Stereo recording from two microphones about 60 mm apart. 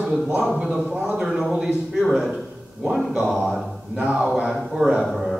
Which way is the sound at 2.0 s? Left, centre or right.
Centre.